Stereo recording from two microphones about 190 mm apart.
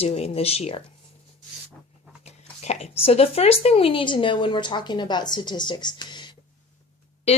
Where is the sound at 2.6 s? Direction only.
35° left (ahead or behind).